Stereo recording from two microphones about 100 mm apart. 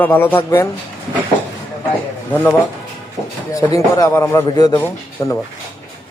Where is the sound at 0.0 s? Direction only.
20° left (ahead or behind).